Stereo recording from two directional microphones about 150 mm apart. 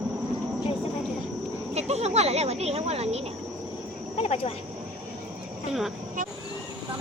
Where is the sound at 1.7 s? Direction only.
45° right (ahead or behind).